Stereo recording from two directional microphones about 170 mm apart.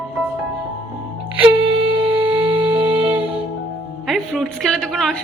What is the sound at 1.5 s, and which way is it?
Wind instrument, 30° right (ahead or behind).